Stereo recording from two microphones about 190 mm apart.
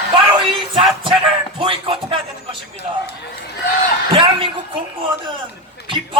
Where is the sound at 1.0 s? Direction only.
25° right (ahead or behind).